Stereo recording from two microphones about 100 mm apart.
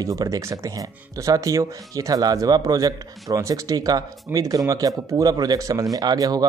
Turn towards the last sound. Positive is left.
turn(degrees=-40)  # may be behind; listen again after turning